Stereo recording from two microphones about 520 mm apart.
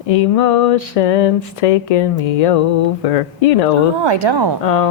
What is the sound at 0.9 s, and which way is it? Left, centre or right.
Speech, left.